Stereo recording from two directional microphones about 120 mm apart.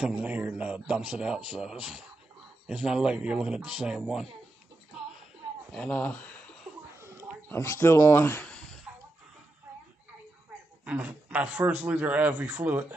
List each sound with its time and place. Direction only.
0.0 s a man's voice: 10° right (ahead or behind)
5.7 s speech: 10° left (ahead or behind)
7.0 s a sound: 20° right (ahead or behind)
7.4 s speech: 20° left (ahead or behind)
8.5 s a sound: 10° left (ahead or behind)
10.9 s a man's voice: 10° right (ahead or behind)